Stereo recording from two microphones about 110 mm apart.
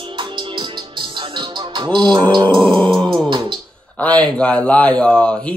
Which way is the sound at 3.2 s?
45° right (ahead or behind).